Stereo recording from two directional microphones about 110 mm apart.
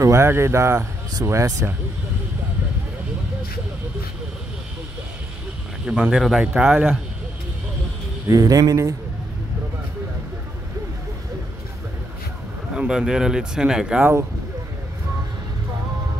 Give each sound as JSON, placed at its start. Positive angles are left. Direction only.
{"t": 0.0, "sound": "speech", "side_deg": -25}
{"t": 5.9, "sound": "speech", "side_deg": -10}
{"t": 8.3, "sound": "speech", "side_deg": -30}
{"t": 12.7, "sound": "speech", "side_deg": -5}